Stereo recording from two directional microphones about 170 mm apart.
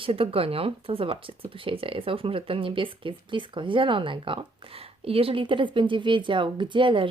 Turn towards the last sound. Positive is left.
turn(degrees=-30)  # may be behind; listen again after turning